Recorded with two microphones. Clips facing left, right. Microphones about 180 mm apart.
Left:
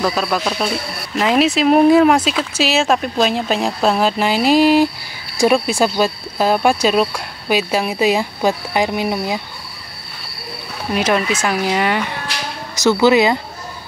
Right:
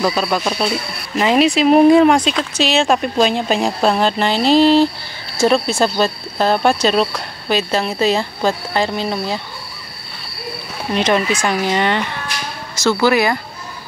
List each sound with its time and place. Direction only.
0.0 s speech: centre (ahead or behind)
10.9 s speech: 5° left (ahead or behind)
12.8 s speech: 20° left (ahead or behind)